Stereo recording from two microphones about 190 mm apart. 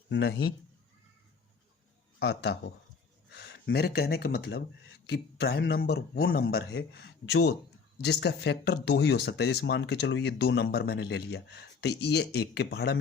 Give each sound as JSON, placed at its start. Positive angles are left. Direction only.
{"t": 0.1, "sound": "speech", "side_deg": 60}
{"t": 2.1, "sound": "speech", "side_deg": 60}